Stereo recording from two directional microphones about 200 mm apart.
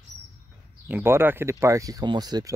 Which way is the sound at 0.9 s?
10° right (ahead or behind).